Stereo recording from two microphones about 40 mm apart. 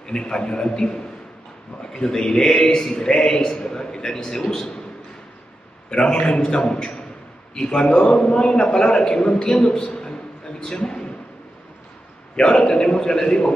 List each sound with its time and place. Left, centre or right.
0.1 s a man's voice: left
5.9 s a man's voice: left
12.4 s a man's voice: centre